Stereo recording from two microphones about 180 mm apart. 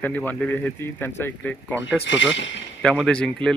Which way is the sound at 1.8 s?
85° left.